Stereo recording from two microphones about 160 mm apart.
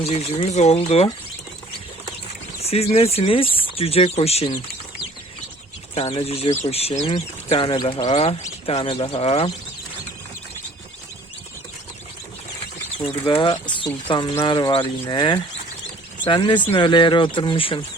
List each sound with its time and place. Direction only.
0.0 s speech: 40° left (ahead or behind)
2.6 s speech: 40° left (ahead or behind)
5.9 s speech: 40° left (ahead or behind)
13.0 s speech: 35° left (ahead or behind)